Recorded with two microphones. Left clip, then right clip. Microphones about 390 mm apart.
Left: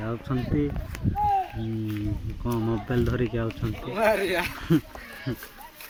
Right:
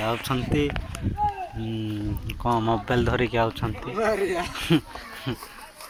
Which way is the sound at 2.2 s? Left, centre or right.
Centre.